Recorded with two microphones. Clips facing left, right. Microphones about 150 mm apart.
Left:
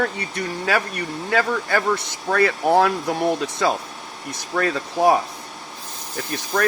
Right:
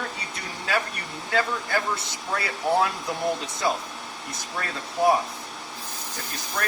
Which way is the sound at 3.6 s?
90° left.